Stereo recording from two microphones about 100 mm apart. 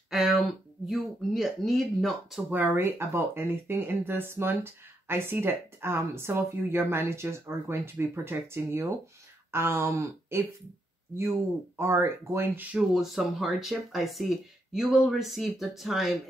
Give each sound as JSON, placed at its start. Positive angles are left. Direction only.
{"t": 0.1, "sound": "speech", "side_deg": 0}
{"t": 2.5, "sound": "speech", "side_deg": -20}
{"t": 12.7, "sound": "speech", "side_deg": -5}